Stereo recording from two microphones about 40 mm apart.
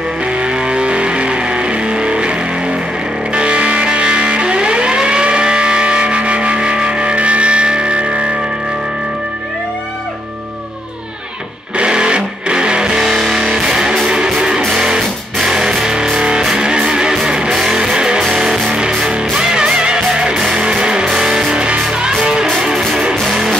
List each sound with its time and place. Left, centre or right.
0.2 s music: right
3.3 s music: right
11.7 s music: right